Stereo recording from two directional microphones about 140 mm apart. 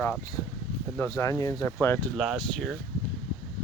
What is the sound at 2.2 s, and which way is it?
Speech, centre (ahead or behind).